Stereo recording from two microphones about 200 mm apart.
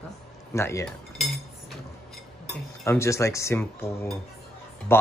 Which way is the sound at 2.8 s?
15° left (ahead or behind).